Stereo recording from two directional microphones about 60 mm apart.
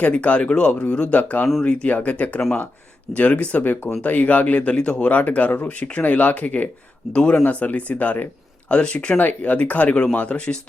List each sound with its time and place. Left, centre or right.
0.0 s speech: left
7.4 s speech: left
9.1 s speech: left